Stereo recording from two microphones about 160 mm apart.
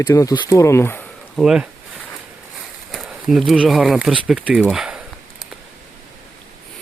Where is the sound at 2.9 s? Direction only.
Centre (ahead or behind).